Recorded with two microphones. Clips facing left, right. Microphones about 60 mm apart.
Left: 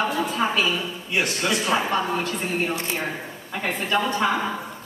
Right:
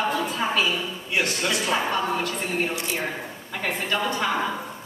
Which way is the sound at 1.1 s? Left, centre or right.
Centre.